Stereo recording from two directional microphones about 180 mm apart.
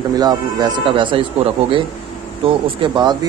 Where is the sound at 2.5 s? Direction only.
25° right (ahead or behind).